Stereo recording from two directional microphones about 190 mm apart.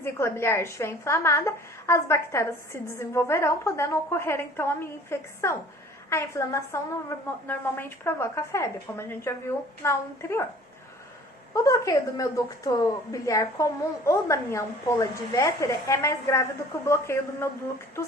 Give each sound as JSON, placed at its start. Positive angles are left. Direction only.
{"t": 0.0, "sound": "a woman's voice", "side_deg": 15}
{"t": 11.5, "sound": "a woman's voice", "side_deg": 15}